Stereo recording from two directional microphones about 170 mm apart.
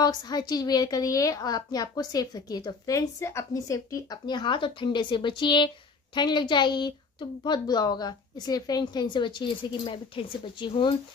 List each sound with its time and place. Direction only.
0.0 s a woman's voice: 25° left (ahead or behind)